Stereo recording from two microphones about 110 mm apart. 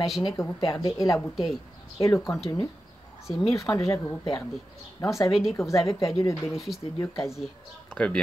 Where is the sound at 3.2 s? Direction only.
Centre (ahead or behind).